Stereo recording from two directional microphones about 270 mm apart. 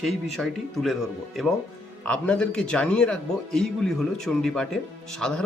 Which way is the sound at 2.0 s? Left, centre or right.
Centre.